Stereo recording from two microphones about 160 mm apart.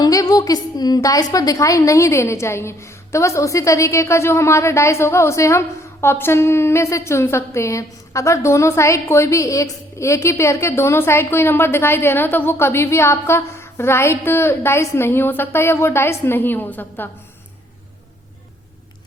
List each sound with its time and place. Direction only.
0.0 s a woman's voice: 20° left (ahead or behind)